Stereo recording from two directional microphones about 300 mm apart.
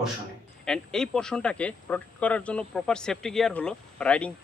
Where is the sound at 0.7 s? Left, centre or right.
Centre.